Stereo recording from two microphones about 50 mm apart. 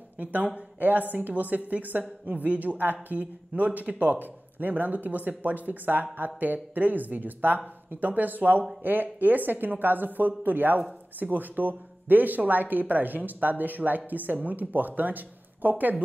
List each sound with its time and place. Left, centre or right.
0.2 s a woman's voice: right